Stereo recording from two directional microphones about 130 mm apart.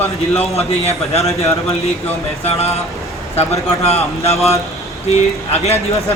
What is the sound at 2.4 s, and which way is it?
Speech, 55° left (ahead or behind).